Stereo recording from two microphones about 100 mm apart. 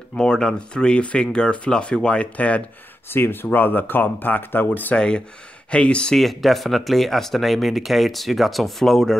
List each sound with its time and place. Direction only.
0.1 s speech: 10° left (ahead or behind)